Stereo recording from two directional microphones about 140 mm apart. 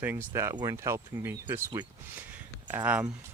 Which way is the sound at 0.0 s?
15° right (ahead or behind).